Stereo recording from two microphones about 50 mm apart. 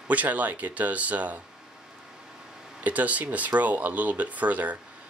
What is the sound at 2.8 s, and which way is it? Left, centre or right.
Speech, right.